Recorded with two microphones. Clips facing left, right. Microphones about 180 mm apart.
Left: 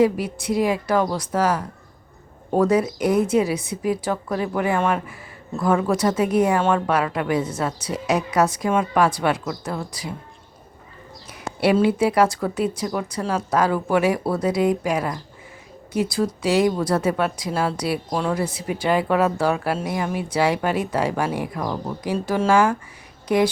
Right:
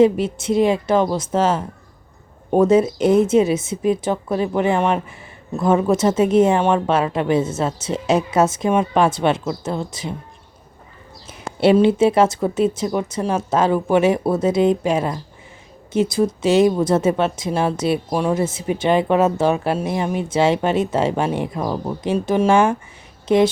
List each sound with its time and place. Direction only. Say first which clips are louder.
0.0 s speech: right 4 dB; 25° right (ahead or behind)
11.3 s speech: right 4 dB; 25° right (ahead or behind)